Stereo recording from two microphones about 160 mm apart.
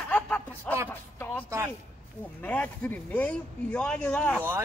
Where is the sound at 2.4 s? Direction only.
10° left (ahead or behind).